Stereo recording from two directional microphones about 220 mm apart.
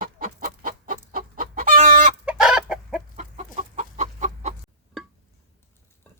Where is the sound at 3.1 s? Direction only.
30° right (ahead or behind).